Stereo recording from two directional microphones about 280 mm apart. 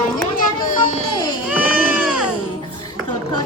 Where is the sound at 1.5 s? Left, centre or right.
Centre.